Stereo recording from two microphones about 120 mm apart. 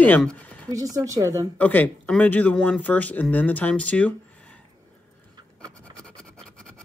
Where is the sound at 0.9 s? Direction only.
25° right (ahead or behind).